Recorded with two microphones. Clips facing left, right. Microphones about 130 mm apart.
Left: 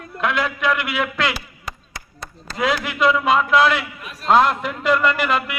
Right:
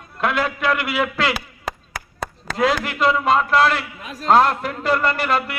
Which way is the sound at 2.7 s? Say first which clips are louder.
Left 1 dB; 40° right (ahead or behind).